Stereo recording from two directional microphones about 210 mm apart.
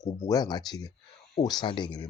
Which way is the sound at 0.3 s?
20° left (ahead or behind).